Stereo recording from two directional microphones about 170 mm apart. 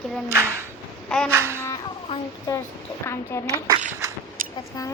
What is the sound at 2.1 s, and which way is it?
Speech, 30° left (ahead or behind).